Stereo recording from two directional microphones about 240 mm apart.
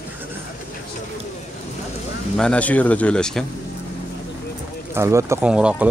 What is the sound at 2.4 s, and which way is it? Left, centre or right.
Speech, centre.